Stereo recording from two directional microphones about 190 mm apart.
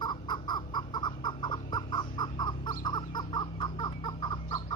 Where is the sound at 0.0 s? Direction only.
25° left (ahead or behind).